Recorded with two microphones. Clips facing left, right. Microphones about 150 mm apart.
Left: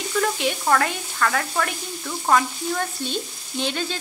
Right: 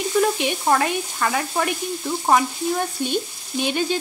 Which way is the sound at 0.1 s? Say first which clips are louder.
Right 2 dB; 20° right (ahead or behind).